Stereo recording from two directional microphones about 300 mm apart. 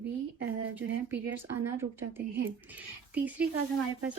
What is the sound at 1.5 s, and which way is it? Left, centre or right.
Speech, centre.